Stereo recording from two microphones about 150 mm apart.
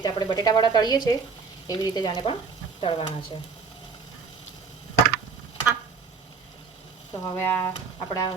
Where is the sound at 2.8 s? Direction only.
35° left (ahead or behind).